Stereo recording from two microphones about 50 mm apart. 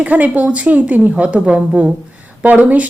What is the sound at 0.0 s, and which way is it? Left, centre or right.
A woman's voice, right.